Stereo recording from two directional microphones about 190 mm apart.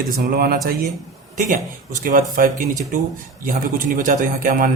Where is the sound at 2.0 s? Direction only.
45° right (ahead or behind).